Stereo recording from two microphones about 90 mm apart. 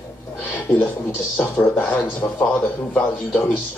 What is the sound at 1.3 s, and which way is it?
Speech, 15° left (ahead or behind).